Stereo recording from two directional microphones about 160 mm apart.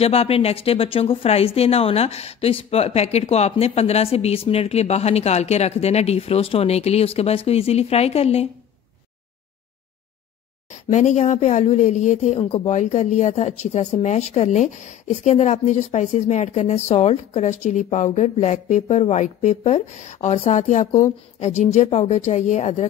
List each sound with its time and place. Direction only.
0.0 s speech: 40° left (ahead or behind)
10.7 s speech: 50° left (ahead or behind)